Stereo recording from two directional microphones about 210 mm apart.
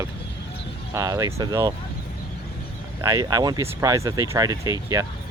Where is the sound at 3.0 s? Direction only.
15° right (ahead or behind).